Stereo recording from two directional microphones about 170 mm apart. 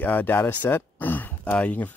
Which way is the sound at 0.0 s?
10° left (ahead or behind).